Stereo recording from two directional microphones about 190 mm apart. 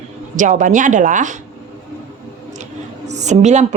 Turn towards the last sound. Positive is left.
turn(degrees=-35)  # may be behind; listen again after turning